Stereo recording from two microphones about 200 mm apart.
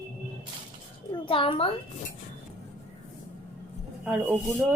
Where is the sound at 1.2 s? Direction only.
25° left (ahead or behind).